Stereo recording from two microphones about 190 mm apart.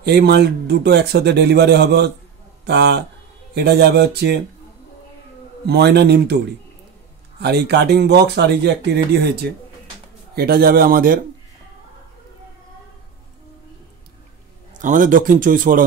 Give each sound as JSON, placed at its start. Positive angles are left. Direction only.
{"t": 0.0, "sound": "speech", "side_deg": -60}
{"t": 5.7, "sound": "speech", "side_deg": -60}
{"t": 7.3, "sound": "a man's voice", "side_deg": -60}
{"t": 14.8, "sound": "a man's voice", "side_deg": -45}